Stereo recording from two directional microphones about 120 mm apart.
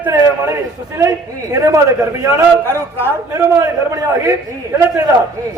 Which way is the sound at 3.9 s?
25° right (ahead or behind).